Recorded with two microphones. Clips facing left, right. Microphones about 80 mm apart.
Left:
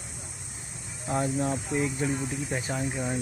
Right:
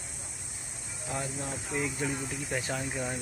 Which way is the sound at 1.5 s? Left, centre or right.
Centre.